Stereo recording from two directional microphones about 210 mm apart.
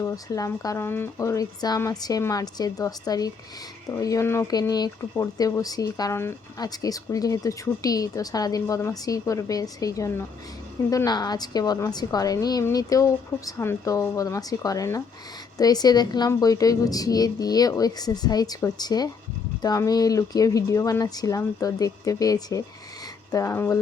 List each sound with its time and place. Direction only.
0.0 s speech: 15° left (ahead or behind)